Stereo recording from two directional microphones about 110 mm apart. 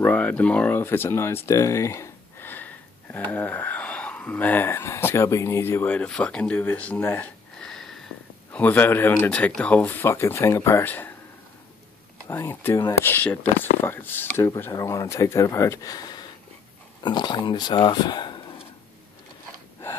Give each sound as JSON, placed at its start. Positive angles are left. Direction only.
{"t": 0.0, "sound": "speech", "side_deg": 15}
{"t": 7.6, "sound": "sniff", "side_deg": 5}
{"t": 8.5, "sound": "speech", "side_deg": 15}
{"t": 12.3, "sound": "speech", "side_deg": 20}
{"t": 14.7, "sound": "speech", "side_deg": 30}